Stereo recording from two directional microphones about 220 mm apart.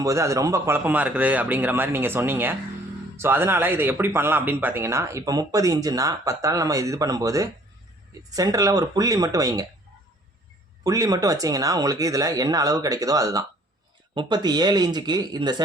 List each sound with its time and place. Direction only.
0.0 s a man's voice: 15° right (ahead or behind)
10.8 s a man's voice: 15° right (ahead or behind)